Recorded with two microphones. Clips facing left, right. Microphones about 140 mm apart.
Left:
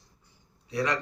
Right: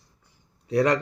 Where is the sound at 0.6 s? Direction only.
50° right (ahead or behind).